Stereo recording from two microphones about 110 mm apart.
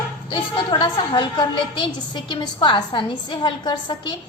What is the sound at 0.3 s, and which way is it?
A woman's voice, 45° left (ahead or behind).